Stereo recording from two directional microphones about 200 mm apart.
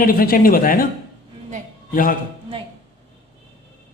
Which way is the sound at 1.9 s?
45° left (ahead or behind).